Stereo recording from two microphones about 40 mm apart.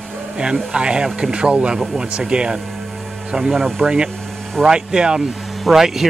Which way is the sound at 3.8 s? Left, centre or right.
Right.